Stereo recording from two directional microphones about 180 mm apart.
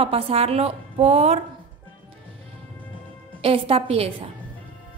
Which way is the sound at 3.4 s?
30° right (ahead or behind).